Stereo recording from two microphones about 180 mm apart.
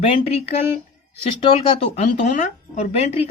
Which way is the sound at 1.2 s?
30° left (ahead or behind).